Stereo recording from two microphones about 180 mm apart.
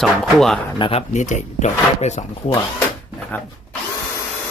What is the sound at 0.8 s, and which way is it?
Speech, 40° left (ahead or behind).